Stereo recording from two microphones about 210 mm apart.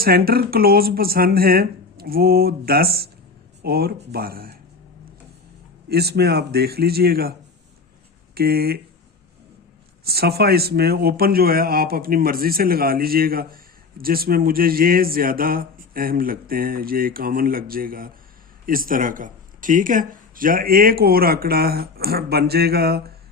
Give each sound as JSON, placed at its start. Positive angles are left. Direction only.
{"t": 0.0, "sound": "speech", "side_deg": -45}
{"t": 5.9, "sound": "speech", "side_deg": -50}
{"t": 8.4, "sound": "speech", "side_deg": -45}
{"t": 10.0, "sound": "speech", "side_deg": -50}